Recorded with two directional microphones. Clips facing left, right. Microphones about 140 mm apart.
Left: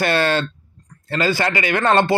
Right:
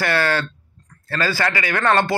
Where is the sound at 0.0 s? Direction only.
25° left (ahead or behind).